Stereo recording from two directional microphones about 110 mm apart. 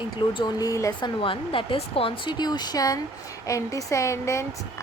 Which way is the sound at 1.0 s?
50° left (ahead or behind).